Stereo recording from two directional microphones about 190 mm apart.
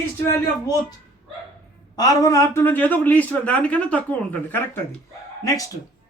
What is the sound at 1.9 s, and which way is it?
A man's voice, 20° left (ahead or behind).